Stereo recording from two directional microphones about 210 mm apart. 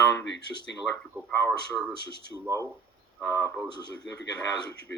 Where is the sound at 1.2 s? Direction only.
5° left (ahead or behind).